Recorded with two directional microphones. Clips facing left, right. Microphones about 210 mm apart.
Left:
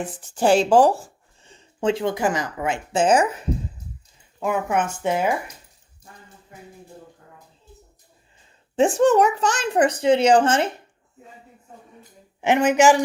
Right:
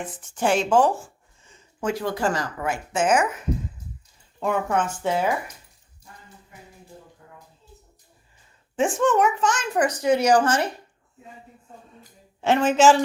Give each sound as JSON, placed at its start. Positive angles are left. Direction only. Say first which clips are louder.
{"t": 0.2, "sound": "speech", "louder": "left 5 dB", "side_deg": 35}
{"t": 4.4, "sound": "speech", "louder": "left 1 dB", "side_deg": 5}
{"t": 4.7, "sound": "speech", "louder": "left 1 dB", "side_deg": 15}
{"t": 8.7, "sound": "a child's voice", "louder": "left 4 dB", "side_deg": 35}
{"t": 12.4, "sound": "speech", "louder": "left 1 dB", "side_deg": 15}